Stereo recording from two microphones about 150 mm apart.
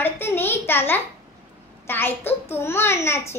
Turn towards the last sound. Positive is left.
turn(degrees=20)  # may be behind; listen again after turning